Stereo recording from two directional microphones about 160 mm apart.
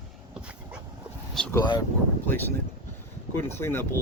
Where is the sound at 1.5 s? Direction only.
25° left (ahead or behind).